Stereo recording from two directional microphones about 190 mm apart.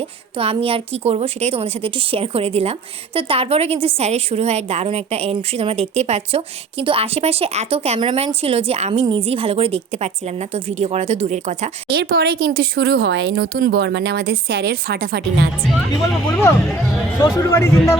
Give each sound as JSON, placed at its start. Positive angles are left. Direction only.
{"t": 0.3, "sound": "a woman's voice", "side_deg": -30}
{"t": 11.9, "sound": "speech", "side_deg": -60}
{"t": 15.9, "sound": "speech", "side_deg": 10}